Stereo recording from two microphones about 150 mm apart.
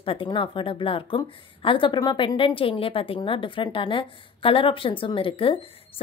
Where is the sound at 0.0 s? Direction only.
35° left (ahead or behind).